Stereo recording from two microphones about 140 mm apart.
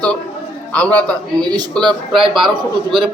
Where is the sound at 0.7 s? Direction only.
10° left (ahead or behind).